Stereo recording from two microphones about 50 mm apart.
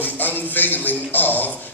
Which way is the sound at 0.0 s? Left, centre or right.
Left.